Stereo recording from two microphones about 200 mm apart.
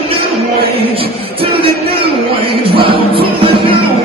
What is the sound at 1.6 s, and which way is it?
Music, 25° right (ahead or behind).